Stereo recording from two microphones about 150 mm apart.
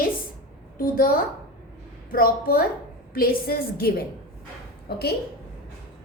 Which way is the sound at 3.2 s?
85° left.